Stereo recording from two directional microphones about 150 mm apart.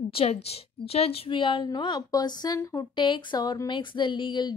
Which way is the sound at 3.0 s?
30° left (ahead or behind).